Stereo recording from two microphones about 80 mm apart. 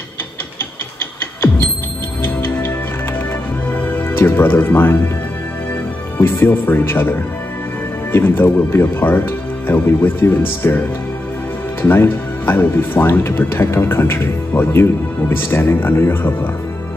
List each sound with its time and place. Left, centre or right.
2.2 s music: left
3.7 s speech: left
6.1 s speech: left
11.8 s speech: left